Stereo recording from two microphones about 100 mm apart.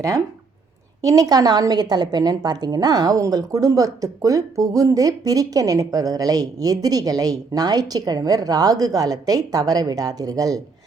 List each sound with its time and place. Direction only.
1.0 s a woman's voice: 40° right (ahead or behind)